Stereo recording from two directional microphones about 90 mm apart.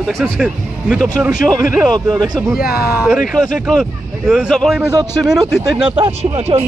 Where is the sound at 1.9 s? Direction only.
50° right (ahead or behind).